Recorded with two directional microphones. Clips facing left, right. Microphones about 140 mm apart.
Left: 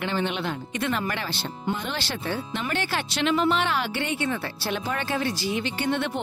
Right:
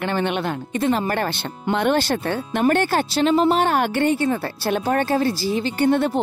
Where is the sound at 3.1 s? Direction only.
40° right (ahead or behind).